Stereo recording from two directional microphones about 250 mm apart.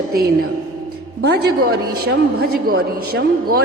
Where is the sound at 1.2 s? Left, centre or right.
Right.